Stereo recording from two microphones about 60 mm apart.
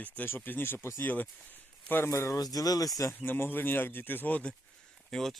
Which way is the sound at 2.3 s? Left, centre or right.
Left.